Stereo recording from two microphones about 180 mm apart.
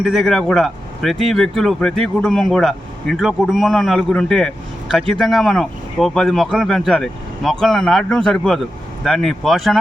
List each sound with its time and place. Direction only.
0.0 s speech: centre (ahead or behind)